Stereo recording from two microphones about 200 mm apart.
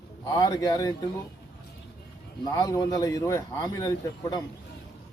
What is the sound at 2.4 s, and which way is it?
Speech, 20° left (ahead or behind).